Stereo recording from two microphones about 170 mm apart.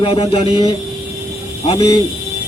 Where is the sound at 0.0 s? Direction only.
35° left (ahead or behind).